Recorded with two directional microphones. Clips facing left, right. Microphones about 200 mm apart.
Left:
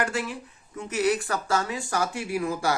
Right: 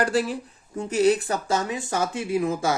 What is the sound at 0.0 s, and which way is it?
Speech, 35° right (ahead or behind).